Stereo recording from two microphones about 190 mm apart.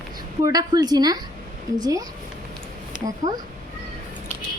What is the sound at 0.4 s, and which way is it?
A woman's voice, 20° right (ahead or behind).